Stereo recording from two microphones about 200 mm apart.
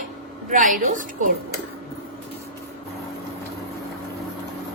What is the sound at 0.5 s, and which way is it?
Speech, 40° right (ahead or behind).